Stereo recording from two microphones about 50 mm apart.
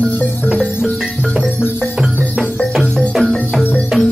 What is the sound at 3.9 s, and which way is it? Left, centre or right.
Music, centre.